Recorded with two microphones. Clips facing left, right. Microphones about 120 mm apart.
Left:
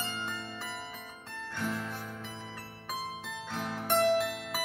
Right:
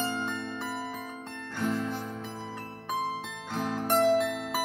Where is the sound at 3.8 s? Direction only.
40° right (ahead or behind).